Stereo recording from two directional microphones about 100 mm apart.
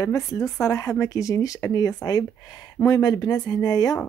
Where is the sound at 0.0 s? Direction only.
30° left (ahead or behind).